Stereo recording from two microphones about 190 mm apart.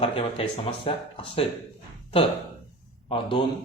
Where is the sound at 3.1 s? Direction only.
25° left (ahead or behind).